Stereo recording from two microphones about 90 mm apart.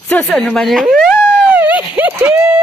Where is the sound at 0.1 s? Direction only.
20° left (ahead or behind).